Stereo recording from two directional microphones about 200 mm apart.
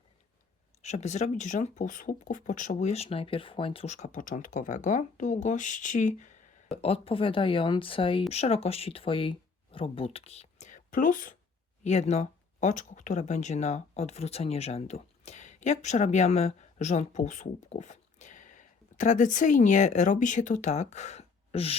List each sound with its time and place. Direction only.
0.8 s speech: 35° left (ahead or behind)